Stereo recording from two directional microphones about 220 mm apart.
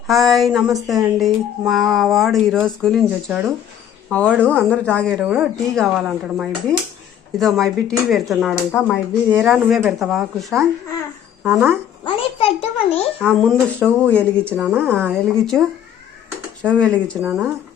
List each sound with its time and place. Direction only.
0.1 s speech: centre (ahead or behind)
4.4 s speech: 5° left (ahead or behind); by 11.8 s 10° right (ahead or behind)
12.0 s a child's voice: 25° left (ahead or behind)
13.1 s speech: 5° left (ahead or behind)
14.6 s speech: 5° right (ahead or behind)
16.6 s speech: 5° left (ahead or behind)
17.2 s speech: 5° right (ahead or behind)